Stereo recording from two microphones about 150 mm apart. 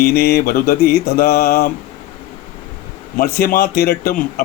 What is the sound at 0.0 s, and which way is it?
Mantra, 90° left.